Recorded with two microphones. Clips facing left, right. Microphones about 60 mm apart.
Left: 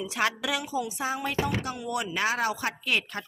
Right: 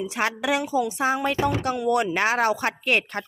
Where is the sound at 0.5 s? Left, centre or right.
Right.